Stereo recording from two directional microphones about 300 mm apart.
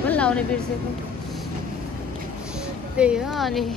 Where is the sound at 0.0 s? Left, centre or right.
Centre.